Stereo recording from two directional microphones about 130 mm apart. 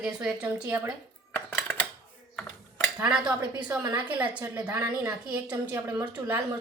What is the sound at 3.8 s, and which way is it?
Speech, 35° right (ahead or behind).